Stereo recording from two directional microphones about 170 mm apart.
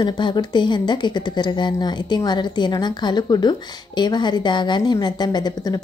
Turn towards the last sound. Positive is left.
turn(degrees=25)  # may be behind; listen again after turning